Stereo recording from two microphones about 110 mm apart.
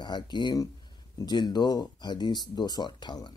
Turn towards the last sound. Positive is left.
turn(degrees=40)  # may be behind; listen again after turning